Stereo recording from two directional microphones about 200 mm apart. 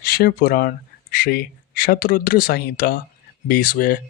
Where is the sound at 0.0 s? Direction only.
50° left (ahead or behind).